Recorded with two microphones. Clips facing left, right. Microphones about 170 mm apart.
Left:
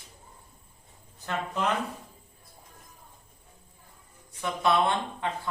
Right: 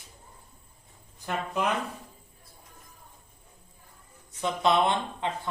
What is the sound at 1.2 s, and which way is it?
Speech, 10° right (ahead or behind).